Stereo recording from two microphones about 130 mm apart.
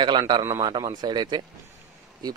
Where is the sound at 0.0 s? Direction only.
35° right (ahead or behind).